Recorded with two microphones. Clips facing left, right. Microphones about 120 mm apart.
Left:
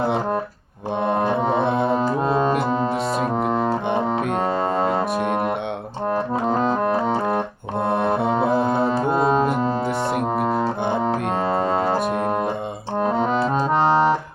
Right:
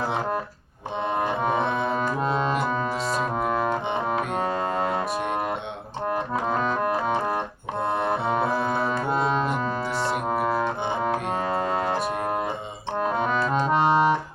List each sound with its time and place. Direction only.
1.0 s music: 55° left (ahead or behind)
2.0 s brass instrument: 30° left (ahead or behind)
2.3 s brass instrument: 45° left (ahead or behind)
2.6 s music: 30° left (ahead or behind)
4.4 s music: 35° left (ahead or behind)
5.1 s music: 50° left (ahead or behind)
6.3 s organ: 30° left (ahead or behind)
7.8 s music: 55° left (ahead or behind)
9.0 s brass instrument: 50° left (ahead or behind)
9.8 s music: 55° left (ahead or behind)
11.4 s music: 30° left (ahead or behind)
13.0 s music: 30° left (ahead or behind)